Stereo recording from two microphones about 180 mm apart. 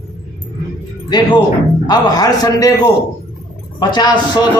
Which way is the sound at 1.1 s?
25° left (ahead or behind).